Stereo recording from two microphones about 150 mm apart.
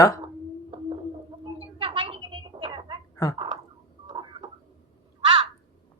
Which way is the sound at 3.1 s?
25° left (ahead or behind).